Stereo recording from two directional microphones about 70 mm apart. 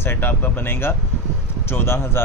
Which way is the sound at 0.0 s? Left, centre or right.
Left.